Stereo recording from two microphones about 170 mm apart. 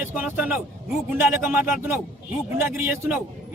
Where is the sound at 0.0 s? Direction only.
10° right (ahead or behind).